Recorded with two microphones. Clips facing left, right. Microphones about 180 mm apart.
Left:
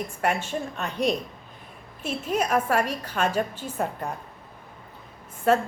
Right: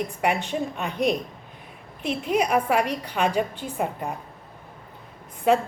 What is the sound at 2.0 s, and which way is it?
A woman's voice, 15° right (ahead or behind).